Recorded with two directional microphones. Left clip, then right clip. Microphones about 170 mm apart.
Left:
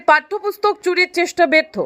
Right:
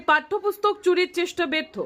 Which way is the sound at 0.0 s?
25° left (ahead or behind).